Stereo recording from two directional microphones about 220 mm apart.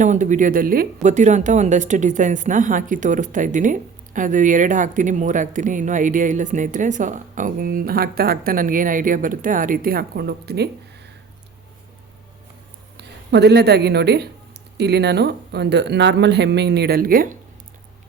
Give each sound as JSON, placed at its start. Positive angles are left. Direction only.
{"t": 0.0, "sound": "a woman's voice", "side_deg": -35}
{"t": 13.0, "sound": "speech", "side_deg": -50}